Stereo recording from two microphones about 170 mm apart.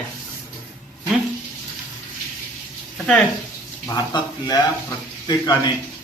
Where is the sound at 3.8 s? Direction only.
20° left (ahead or behind).